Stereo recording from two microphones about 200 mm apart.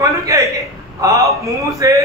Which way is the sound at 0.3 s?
15° right (ahead or behind).